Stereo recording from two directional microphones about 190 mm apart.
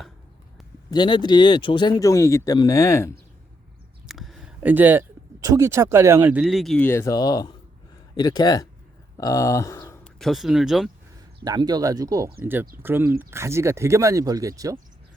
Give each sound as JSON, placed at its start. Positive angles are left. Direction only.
{"t": 0.9, "sound": "speech", "side_deg": 25}
{"t": 4.0, "sound": "a sound", "side_deg": 0}
{"t": 6.4, "sound": "speech", "side_deg": 0}
{"t": 11.4, "sound": "speech", "side_deg": -20}